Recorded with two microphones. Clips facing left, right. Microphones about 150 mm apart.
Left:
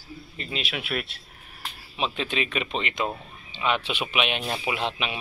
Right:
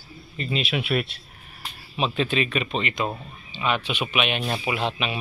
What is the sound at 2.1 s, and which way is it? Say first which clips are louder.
Speech: right 4 dB; 15° left (ahead or behind).